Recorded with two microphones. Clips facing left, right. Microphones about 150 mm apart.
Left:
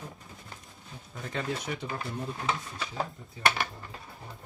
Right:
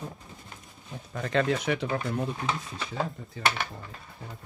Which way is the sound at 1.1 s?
85° right.